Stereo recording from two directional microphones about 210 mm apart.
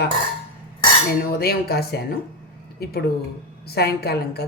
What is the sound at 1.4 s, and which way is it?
A woman's voice, 45° left (ahead or behind).